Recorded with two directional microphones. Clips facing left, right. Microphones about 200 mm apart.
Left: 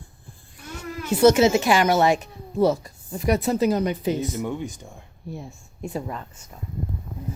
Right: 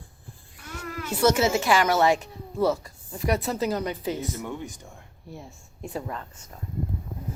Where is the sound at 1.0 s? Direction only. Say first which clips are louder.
Left 6 dB; 20° left (ahead or behind).